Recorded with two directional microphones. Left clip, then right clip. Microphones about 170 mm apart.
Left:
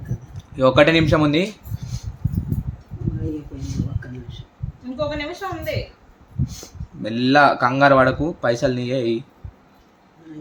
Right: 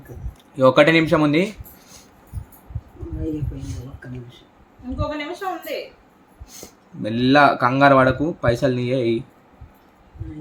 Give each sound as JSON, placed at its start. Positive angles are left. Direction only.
{"t": 0.5, "sound": "speech", "side_deg": -5}
{"t": 4.9, "sound": "a woman's voice", "side_deg": 20}
{"t": 6.4, "sound": "speech", "side_deg": 0}